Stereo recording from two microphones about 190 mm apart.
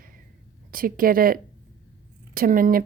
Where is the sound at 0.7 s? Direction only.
50° right (ahead or behind).